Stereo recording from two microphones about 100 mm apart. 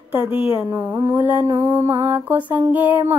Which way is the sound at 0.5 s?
20° right (ahead or behind).